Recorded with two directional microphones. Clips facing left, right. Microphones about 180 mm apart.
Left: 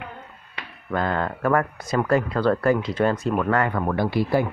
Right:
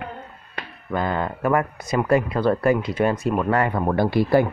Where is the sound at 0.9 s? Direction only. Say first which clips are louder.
Even; 10° right (ahead or behind).